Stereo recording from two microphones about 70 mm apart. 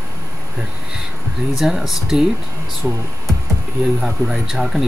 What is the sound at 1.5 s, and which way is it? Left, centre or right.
Speech, centre.